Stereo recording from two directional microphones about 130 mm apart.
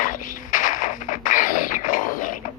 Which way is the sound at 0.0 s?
90° left.